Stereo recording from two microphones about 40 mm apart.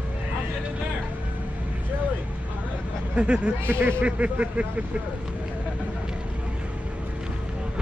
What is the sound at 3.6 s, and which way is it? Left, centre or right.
Speech, right.